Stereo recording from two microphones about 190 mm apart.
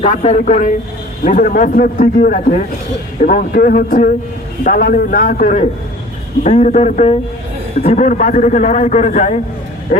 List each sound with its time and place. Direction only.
0.0 s a man's voice: 35° left (ahead or behind)